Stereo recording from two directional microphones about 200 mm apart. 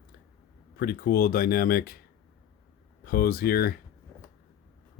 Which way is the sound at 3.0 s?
50° left (ahead or behind).